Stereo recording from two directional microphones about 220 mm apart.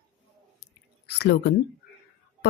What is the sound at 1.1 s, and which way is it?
Speech, 50° left (ahead or behind).